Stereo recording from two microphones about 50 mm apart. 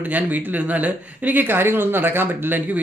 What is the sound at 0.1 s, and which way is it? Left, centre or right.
Speech, right.